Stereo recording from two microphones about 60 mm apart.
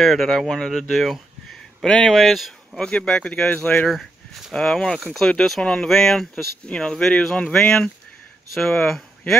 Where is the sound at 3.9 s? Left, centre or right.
Centre.